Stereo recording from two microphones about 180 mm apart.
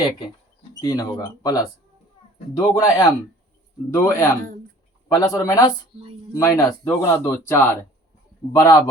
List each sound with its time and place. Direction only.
0.8 s speech: 20° left (ahead or behind)